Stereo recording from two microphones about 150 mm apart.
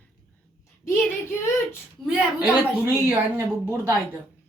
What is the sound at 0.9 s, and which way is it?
Speech, 15° left (ahead or behind).